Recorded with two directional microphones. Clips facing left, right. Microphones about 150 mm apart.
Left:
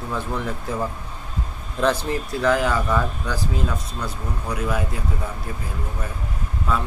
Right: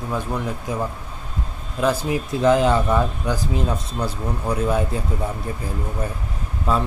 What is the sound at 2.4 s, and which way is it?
Speech, 25° right (ahead or behind).